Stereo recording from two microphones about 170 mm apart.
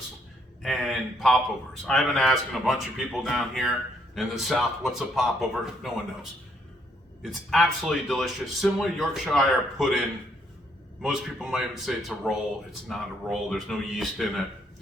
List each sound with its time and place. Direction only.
0.6 s speech: centre (ahead or behind)
7.2 s speech: centre (ahead or behind)
11.0 s speech: 5° right (ahead or behind)